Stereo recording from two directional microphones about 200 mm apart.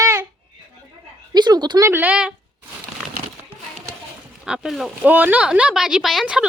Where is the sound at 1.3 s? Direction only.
20° right (ahead or behind).